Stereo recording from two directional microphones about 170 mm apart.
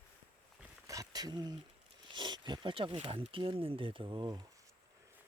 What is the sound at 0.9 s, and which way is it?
Speech, 20° right (ahead or behind).